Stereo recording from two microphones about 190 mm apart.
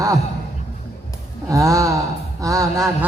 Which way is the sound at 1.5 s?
15° right (ahead or behind).